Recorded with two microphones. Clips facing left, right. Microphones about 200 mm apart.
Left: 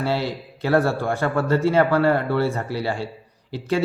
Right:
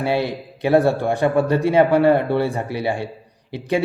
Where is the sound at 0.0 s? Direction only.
15° right (ahead or behind).